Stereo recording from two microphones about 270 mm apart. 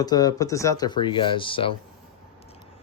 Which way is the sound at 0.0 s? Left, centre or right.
Centre.